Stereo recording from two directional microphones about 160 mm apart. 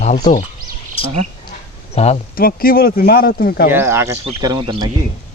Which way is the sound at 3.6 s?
15° right (ahead or behind).